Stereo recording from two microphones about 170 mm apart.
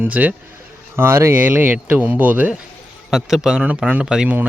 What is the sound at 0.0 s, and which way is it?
A man's voice, 10° right (ahead or behind).